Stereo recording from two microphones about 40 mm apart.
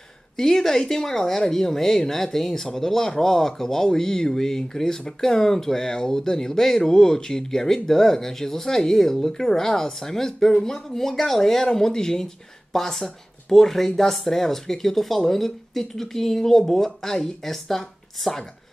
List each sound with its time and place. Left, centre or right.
0.4 s speech: centre